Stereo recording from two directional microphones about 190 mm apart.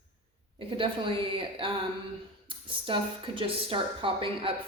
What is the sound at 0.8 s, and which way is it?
A woman's voice, 25° right (ahead or behind).